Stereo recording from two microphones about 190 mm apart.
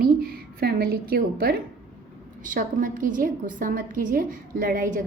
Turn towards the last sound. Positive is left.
turn(degrees=-45)  # may be behind; listen again after turning